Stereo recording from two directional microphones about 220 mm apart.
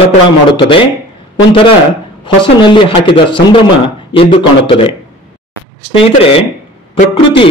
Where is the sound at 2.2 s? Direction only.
20° left (ahead or behind).